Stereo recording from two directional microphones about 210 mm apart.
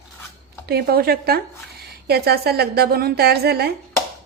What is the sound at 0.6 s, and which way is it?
A woman's voice, 50° right (ahead or behind).